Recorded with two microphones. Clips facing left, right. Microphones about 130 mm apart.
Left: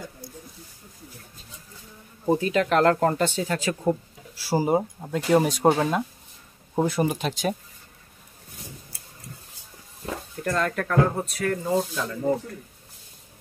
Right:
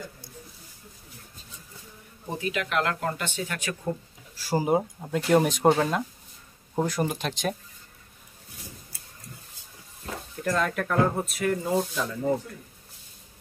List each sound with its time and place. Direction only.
2.2 s speech: 35° left (ahead or behind)
4.4 s speech: 5° left (ahead or behind)
10.3 s speech: centre (ahead or behind)